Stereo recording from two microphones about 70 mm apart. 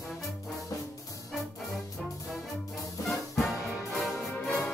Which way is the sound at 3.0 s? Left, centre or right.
Centre.